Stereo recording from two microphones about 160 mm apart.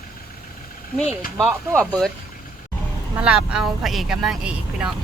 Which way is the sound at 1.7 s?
5° left (ahead or behind).